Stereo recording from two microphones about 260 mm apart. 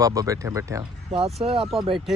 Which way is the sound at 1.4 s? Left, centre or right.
Right.